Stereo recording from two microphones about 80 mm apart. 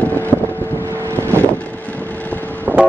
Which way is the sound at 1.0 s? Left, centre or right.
Right.